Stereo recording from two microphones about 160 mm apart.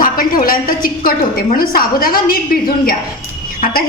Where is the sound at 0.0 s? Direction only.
65° left (ahead or behind).